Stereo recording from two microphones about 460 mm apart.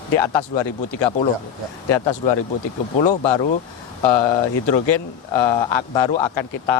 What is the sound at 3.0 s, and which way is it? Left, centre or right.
Speech, left.